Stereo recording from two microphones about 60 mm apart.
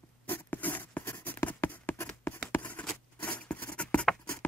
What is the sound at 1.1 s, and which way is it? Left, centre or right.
Writing, left.